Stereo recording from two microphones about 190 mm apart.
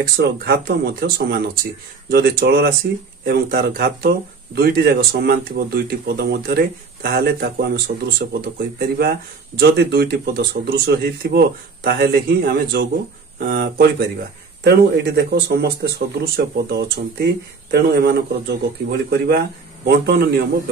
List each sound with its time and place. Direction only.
0.5 s speech: 55° right (ahead or behind)